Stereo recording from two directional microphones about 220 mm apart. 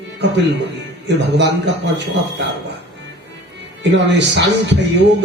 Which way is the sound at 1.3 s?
50° right (ahead or behind).